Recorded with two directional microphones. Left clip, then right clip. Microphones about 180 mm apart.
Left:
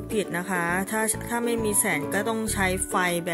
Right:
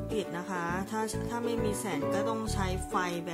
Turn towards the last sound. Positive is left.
turn(degrees=20)  # may be behind; listen again after turning